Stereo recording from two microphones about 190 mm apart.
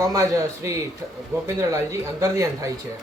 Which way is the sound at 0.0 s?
15° right (ahead or behind).